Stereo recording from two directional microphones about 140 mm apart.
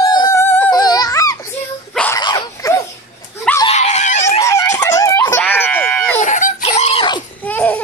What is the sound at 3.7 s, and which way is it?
Dog, 55° left (ahead or behind).